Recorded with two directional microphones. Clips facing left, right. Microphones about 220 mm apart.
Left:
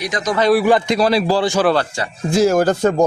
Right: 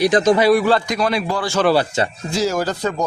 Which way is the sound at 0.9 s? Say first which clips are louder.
Left 5 dB; 35° left (ahead or behind).